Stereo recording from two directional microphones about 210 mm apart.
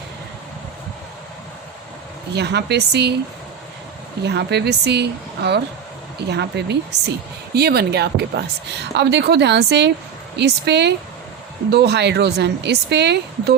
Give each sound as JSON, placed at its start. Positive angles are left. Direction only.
{"t": 2.3, "sound": "a woman's voice", "side_deg": -50}
{"t": 4.2, "sound": "a woman's voice", "side_deg": -50}